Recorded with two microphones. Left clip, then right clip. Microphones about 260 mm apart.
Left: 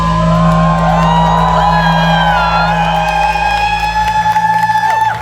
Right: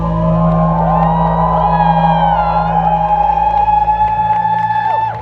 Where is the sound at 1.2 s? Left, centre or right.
Left.